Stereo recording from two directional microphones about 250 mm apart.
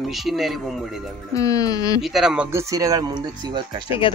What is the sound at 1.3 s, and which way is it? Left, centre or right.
Speech, centre.